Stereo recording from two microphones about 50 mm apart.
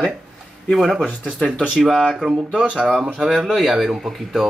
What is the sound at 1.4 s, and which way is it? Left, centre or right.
Speech, centre.